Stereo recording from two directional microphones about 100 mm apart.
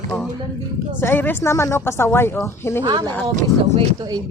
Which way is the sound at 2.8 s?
40° right (ahead or behind).